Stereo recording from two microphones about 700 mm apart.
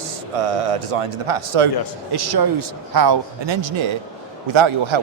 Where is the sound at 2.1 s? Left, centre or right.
Right.